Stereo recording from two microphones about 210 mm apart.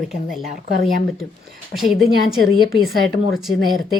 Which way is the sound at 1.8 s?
Centre (ahead or behind).